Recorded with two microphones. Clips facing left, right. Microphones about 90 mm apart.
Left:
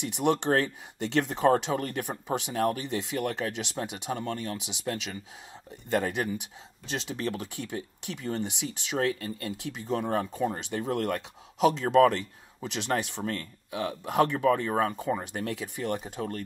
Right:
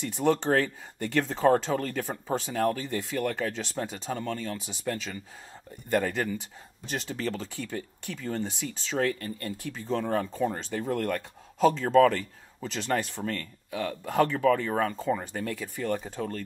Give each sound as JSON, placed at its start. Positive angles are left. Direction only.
{"t": 0.0, "sound": "speech", "side_deg": 20}
{"t": 6.0, "sound": "speech", "side_deg": 20}